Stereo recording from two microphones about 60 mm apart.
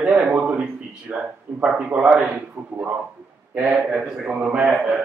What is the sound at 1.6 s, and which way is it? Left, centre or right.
Speech, centre.